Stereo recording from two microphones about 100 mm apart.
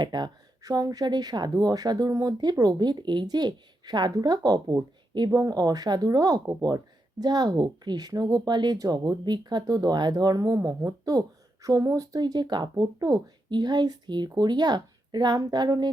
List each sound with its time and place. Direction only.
0.0 s speech: 45° right (ahead or behind)